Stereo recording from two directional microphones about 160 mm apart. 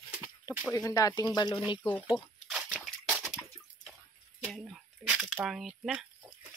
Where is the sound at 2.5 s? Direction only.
5° right (ahead or behind).